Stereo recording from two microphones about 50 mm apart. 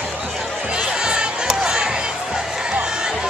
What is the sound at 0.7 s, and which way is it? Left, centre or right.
Music, centre.